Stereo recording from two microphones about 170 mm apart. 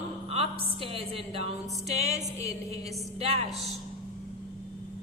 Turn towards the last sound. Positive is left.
turn(degrees=-35)  # may be behind; listen again after turning